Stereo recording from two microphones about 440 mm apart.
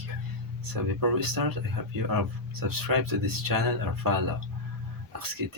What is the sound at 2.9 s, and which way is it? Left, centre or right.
Speech, right.